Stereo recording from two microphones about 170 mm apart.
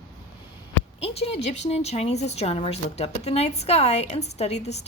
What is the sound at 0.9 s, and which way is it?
A woman's voice, 35° left (ahead or behind).